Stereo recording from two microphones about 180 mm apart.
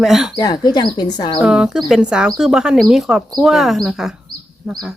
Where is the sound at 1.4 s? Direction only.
5° right (ahead or behind).